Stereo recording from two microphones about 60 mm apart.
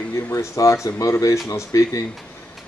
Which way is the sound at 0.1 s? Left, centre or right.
Left.